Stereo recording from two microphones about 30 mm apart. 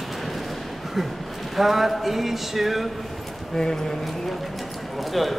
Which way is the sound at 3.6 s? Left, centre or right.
Centre.